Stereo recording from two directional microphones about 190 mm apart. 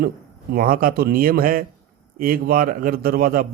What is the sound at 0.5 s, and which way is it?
Speech, 50° right (ahead or behind).